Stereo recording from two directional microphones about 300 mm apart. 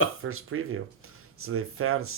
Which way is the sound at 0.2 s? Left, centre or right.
Right.